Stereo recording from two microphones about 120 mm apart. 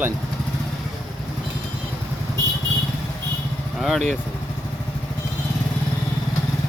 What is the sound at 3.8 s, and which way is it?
Speech, centre (ahead or behind).